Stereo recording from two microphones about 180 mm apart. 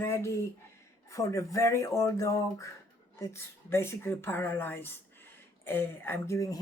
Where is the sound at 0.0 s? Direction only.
15° left (ahead or behind).